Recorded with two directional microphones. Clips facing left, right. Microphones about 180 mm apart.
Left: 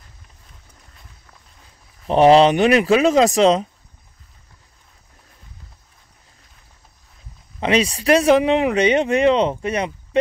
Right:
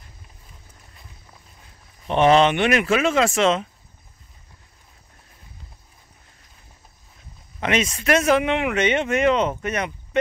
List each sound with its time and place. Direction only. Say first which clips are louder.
2.0 s speech: left 4 dB; 35° left (ahead or behind)
7.6 s speech: left 4 dB; 35° left (ahead or behind)